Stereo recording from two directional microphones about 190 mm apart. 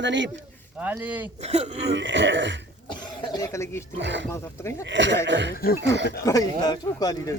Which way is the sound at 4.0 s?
70° right (ahead or behind).